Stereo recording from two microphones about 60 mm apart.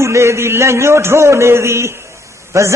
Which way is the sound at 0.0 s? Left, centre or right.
Right.